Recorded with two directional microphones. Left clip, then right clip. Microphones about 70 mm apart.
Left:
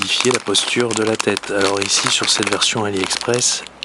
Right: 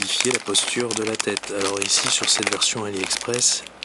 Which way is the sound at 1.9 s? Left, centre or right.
Left.